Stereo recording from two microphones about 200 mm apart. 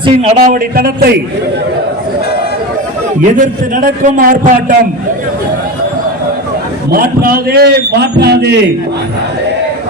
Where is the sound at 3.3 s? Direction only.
40° right (ahead or behind).